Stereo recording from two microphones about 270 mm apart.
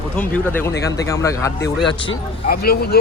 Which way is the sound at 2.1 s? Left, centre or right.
Left.